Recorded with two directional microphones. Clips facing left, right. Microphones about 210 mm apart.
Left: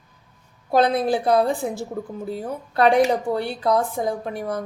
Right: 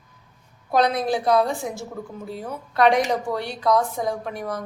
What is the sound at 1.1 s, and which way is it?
Speech, 30° left (ahead or behind).